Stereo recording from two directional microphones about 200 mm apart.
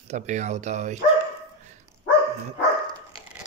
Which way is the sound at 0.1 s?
35° right (ahead or behind).